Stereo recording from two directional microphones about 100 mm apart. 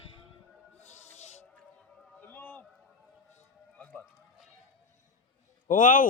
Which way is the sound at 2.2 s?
20° left (ahead or behind).